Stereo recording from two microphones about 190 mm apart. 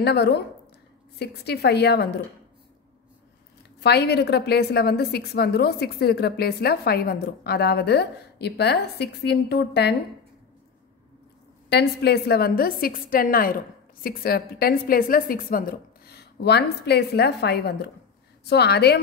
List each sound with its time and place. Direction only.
0.0 s a woman's voice: 60° left (ahead or behind)
3.8 s a woman's voice: 60° left (ahead or behind)
11.7 s a woman's voice: 60° left (ahead or behind)